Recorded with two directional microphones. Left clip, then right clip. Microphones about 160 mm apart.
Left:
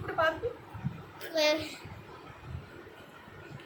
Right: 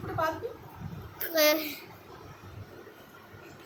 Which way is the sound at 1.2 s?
45° right (ahead or behind).